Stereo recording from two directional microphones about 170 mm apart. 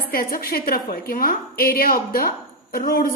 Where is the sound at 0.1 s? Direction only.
60° left (ahead or behind).